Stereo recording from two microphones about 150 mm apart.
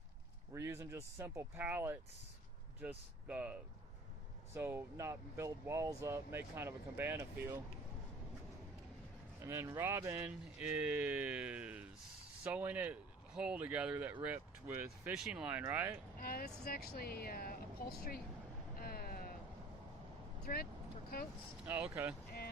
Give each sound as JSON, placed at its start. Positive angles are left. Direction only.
{"t": 0.5, "sound": "speech", "side_deg": -20}
{"t": 9.4, "sound": "speech", "side_deg": -20}
{"t": 16.1, "sound": "speech", "side_deg": 80}
{"t": 18.8, "sound": "a sound", "side_deg": 85}
{"t": 20.4, "sound": "speech", "side_deg": 90}